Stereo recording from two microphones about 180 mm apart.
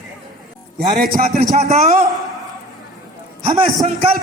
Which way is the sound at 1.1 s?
55° right (ahead or behind).